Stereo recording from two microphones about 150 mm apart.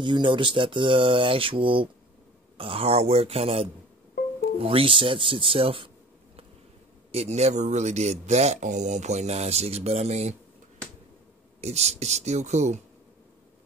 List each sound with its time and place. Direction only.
0.0 s speech: 30° right (ahead or behind)
7.1 s speech: 45° right (ahead or behind)
11.6 s speech: 45° right (ahead or behind)